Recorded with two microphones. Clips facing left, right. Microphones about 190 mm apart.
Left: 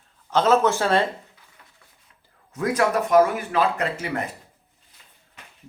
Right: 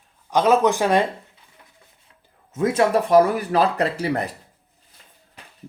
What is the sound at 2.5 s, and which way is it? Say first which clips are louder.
Speech: right 3 dB; 25° right (ahead or behind).